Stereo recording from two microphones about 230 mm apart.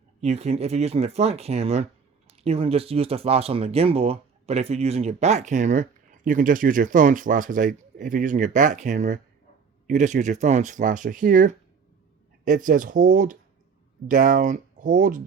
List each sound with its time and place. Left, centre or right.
0.2 s speech: right